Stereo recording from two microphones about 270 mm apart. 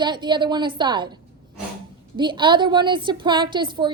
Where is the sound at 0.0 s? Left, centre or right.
Centre.